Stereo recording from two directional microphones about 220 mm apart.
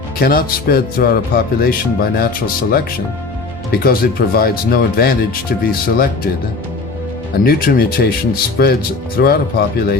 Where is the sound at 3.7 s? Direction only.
45° left (ahead or behind).